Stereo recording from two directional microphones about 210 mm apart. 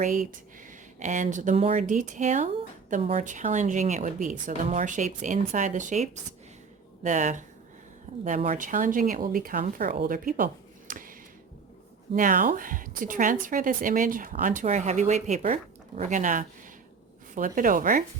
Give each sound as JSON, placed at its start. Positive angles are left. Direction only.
{"t": 0.0, "sound": "a woman's voice", "side_deg": -35}
{"t": 12.1, "sound": "a woman's voice", "side_deg": -40}